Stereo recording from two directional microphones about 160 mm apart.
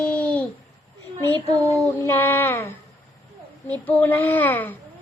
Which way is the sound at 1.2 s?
10° left (ahead or behind).